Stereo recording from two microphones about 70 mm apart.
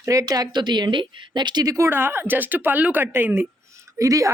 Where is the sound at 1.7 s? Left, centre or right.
Right.